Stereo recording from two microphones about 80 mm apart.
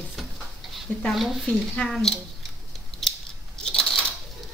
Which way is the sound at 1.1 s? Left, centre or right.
Centre.